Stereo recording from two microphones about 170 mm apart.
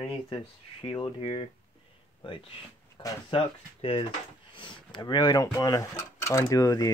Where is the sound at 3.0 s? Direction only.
20° left (ahead or behind).